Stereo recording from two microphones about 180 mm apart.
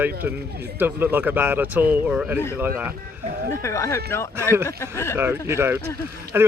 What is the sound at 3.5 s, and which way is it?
Speech, 15° left (ahead or behind).